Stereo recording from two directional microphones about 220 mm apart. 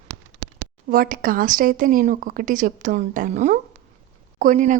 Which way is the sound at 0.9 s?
40° right (ahead or behind).